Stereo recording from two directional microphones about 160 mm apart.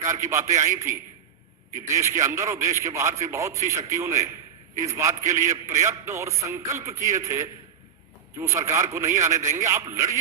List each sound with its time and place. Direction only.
0.0 s a man's voice: 15° right (ahead or behind)